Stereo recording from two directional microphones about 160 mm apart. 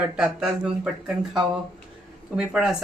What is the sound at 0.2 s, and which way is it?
Speech, 5° right (ahead or behind).